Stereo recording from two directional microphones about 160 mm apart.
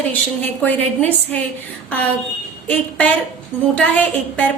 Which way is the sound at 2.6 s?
10° left (ahead or behind).